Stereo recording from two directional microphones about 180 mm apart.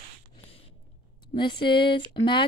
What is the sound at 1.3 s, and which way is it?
Speech, 25° left (ahead or behind).